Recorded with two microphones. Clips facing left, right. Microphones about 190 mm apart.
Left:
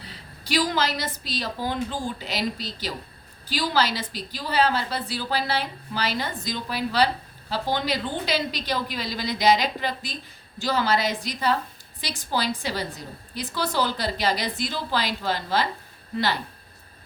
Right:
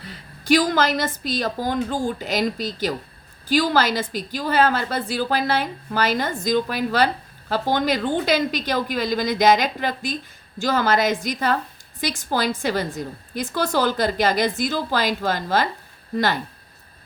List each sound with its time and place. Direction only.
0.4 s a woman's voice: 50° right (ahead or behind)